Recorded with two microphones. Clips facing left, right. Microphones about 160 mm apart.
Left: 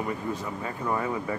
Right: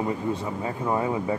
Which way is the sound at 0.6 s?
20° right (ahead or behind).